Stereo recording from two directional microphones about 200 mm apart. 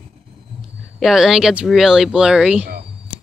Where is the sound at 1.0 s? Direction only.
Centre (ahead or behind).